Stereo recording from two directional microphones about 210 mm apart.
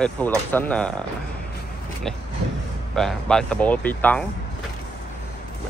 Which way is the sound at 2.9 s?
Centre (ahead or behind).